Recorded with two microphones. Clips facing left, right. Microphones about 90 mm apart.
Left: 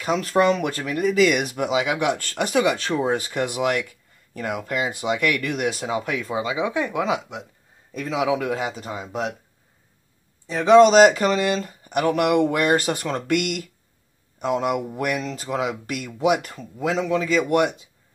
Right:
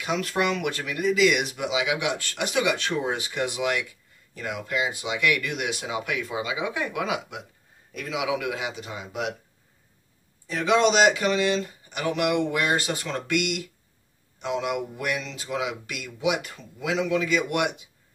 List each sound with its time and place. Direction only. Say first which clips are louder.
0.0 s speech: left 6 dB; 40° left (ahead or behind)
10.4 s a man's voice: left 4 dB; 30° left (ahead or behind)
10.7 s speech: left 8 dB; 40° left (ahead or behind)